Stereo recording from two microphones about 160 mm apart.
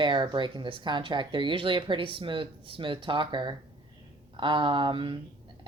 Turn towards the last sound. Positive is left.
turn(degrees=-30)  # may be behind; listen again after turning